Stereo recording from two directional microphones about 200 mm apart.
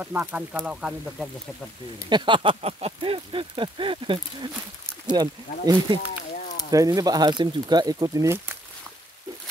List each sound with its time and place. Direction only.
0.0 s speech: 10° right (ahead or behind)
2.0 s speech: 25° right (ahead or behind)